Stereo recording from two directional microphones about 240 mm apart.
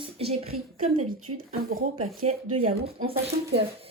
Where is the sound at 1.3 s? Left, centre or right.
Right.